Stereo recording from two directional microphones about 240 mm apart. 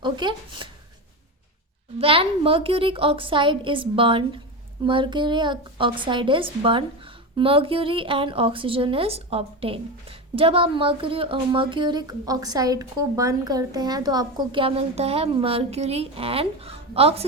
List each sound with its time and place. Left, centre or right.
0.0 s speech: centre
2.0 s speech: right